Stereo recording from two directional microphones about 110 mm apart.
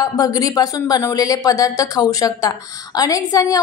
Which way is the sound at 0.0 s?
35° left (ahead or behind).